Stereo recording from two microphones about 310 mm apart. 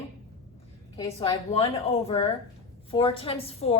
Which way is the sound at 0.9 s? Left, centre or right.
Centre.